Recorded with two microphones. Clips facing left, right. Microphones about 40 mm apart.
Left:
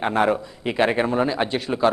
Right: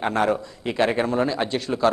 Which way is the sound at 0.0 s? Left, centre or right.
Centre.